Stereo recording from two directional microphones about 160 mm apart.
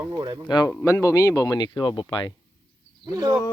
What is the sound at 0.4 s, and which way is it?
Speech, 25° left (ahead or behind).